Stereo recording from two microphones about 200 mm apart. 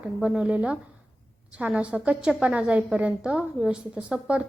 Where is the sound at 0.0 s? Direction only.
5° right (ahead or behind).